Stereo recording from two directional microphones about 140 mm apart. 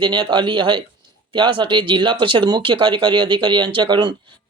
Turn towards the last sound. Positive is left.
turn(degrees=-35)  # may be behind; listen again after turning